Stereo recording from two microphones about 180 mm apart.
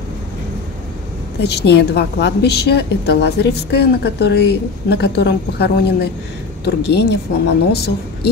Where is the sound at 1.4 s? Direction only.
70° left (ahead or behind).